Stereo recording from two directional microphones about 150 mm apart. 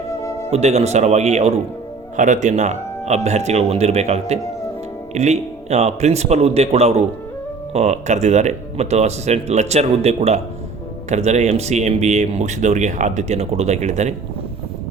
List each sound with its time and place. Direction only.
0.5 s speech: 45° right (ahead or behind)